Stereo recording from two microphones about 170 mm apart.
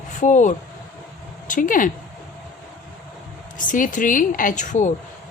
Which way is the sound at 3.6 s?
50° left (ahead or behind).